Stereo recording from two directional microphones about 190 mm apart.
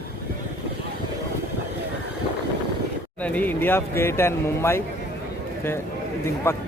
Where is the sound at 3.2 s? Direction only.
10° left (ahead or behind).